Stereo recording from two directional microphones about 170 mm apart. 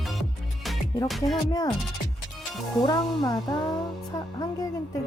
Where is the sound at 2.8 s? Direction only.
25° left (ahead or behind).